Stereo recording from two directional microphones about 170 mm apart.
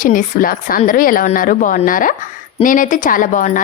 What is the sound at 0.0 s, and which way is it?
A woman's voice, 55° left (ahead or behind).